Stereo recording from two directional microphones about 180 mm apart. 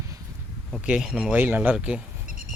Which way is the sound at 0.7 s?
5° right (ahead or behind).